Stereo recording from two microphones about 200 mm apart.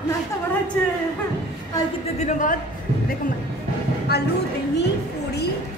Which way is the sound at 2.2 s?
40° left (ahead or behind).